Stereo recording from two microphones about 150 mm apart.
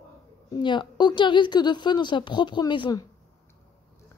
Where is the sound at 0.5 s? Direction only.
30° left (ahead or behind).